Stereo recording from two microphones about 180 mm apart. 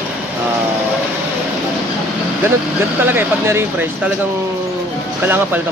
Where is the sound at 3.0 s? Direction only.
15° right (ahead or behind).